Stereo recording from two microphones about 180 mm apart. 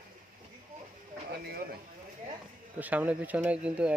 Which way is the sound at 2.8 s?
10° right (ahead or behind).